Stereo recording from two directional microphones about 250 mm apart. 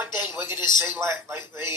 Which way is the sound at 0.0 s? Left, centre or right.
Centre.